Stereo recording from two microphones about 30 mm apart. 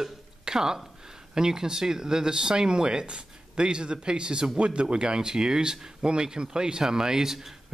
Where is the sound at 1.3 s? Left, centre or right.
Right.